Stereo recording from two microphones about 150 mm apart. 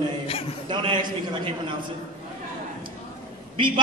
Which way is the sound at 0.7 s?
35° right (ahead or behind).